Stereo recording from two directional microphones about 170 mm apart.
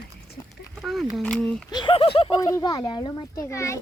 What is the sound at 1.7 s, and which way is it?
Speech, 25° left (ahead or behind).